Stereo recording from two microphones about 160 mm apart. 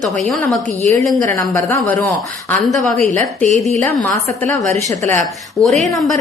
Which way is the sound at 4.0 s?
10° left (ahead or behind).